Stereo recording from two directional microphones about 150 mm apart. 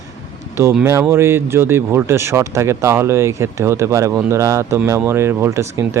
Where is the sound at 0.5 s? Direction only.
15° right (ahead or behind).